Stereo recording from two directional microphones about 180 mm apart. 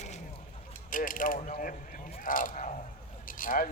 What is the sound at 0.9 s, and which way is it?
Speech, 50° left (ahead or behind).